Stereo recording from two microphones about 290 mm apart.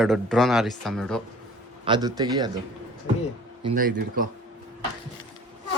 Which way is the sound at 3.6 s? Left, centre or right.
Right.